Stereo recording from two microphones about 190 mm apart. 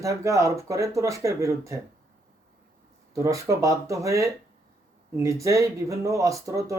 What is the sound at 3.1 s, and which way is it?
Speech, 15° right (ahead or behind).